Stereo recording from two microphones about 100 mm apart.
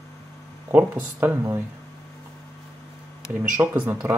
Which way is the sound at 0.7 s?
20° right (ahead or behind).